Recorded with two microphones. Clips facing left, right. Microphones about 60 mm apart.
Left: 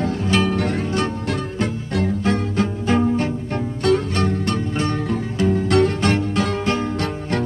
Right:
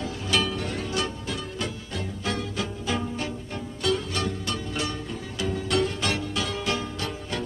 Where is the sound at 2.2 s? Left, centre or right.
Left.